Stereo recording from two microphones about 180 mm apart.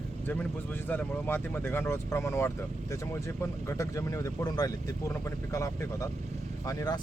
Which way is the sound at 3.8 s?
15° left (ahead or behind).